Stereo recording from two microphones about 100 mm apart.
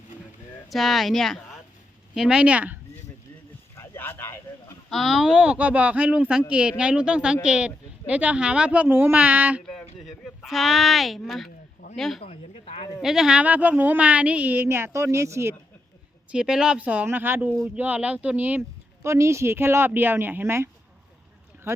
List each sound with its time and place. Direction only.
0.7 s speech: centre (ahead or behind)
3.8 s a sound: 20° left (ahead or behind)
4.9 s speech: centre (ahead or behind)
10.0 s speech: centre (ahead or behind)
12.2 s a sound: 80° left
13.0 s speech: 5° right (ahead or behind); by 15.5 s 25° right (ahead or behind)
16.3 s speech: 10° right (ahead or behind)
19.0 s speech: 30° right (ahead or behind)